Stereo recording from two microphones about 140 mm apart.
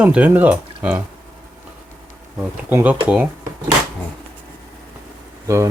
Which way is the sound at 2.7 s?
15° right (ahead or behind).